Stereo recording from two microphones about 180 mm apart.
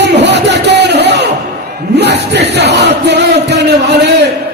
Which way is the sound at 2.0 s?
70° right (ahead or behind).